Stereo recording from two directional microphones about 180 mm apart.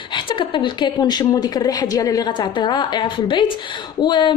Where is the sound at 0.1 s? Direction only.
30° left (ahead or behind).